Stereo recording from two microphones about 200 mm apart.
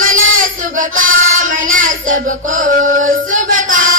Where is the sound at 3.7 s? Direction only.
40° right (ahead or behind).